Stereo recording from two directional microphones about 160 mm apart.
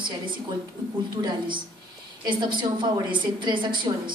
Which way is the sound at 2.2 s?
30° right (ahead or behind).